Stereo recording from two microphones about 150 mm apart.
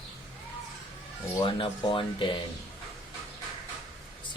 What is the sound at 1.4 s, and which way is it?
Speech, 35° left (ahead or behind).